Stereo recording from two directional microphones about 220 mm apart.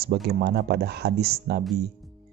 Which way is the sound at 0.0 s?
45° right (ahead or behind).